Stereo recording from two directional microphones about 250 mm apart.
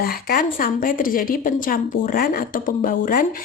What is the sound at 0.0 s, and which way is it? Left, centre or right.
A woman's voice, left.